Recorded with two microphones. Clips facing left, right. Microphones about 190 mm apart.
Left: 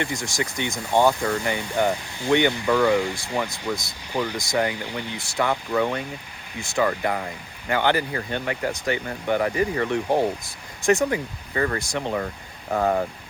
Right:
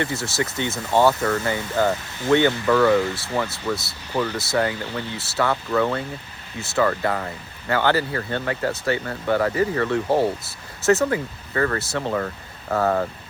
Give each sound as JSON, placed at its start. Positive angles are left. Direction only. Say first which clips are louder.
{"t": 0.0, "sound": "speech", "louder": "right 2 dB", "side_deg": 15}